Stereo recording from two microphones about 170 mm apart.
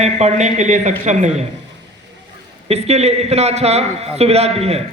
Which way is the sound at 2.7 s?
40° right (ahead or behind).